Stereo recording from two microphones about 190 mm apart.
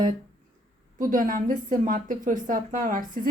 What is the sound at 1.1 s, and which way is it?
A woman's voice, 45° right (ahead or behind).